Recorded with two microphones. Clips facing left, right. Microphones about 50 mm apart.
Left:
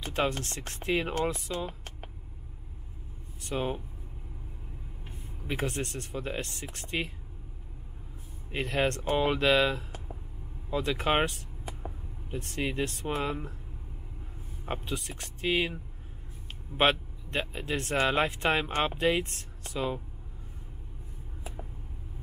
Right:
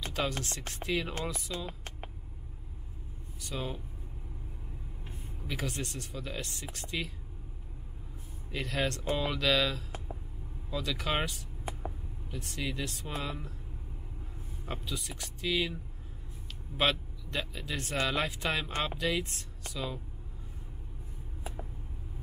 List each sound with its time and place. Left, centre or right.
0.0 s chopping: left
0.4 s speech: left
1.7 s a sound: right
3.4 s speech: left
5.5 s speech: left
8.5 s speech: left
14.7 s speech: left